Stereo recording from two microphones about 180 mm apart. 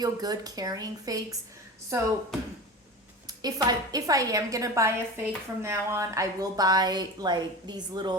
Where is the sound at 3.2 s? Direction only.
20° right (ahead or behind).